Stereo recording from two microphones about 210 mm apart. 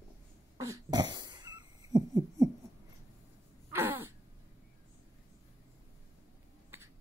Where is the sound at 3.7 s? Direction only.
10° right (ahead or behind).